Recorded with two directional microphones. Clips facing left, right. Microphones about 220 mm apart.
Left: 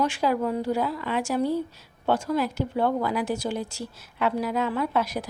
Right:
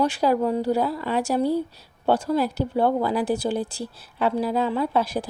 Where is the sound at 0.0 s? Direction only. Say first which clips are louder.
Right 3 dB; 35° right (ahead or behind).